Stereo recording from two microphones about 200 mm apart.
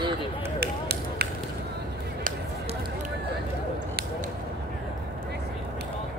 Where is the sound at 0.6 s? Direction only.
55° right (ahead or behind).